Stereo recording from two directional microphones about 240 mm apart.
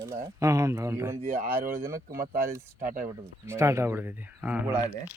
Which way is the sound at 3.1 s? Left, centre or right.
Centre.